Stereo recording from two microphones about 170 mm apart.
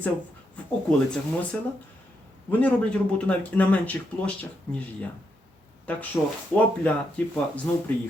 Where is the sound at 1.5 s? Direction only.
5° left (ahead or behind).